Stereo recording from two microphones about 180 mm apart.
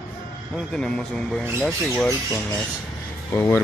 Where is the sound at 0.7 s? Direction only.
5° left (ahead or behind).